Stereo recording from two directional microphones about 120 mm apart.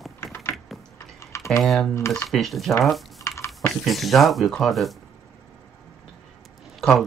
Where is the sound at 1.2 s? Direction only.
25° left (ahead or behind).